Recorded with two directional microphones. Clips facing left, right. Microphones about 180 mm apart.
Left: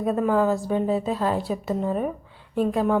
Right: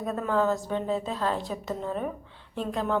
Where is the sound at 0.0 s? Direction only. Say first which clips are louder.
Left 5 dB; 10° left (ahead or behind).